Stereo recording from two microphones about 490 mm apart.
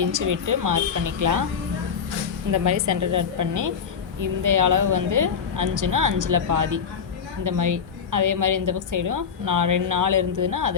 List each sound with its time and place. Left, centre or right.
0.0 s a woman's voice: right
2.5 s a woman's voice: right